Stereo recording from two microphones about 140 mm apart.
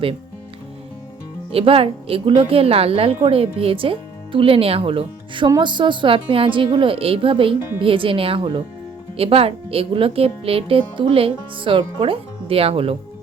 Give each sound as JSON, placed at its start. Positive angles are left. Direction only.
{"t": 1.5, "sound": "speech", "side_deg": -45}